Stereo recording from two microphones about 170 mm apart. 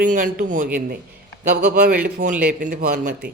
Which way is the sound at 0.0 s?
50° right (ahead or behind).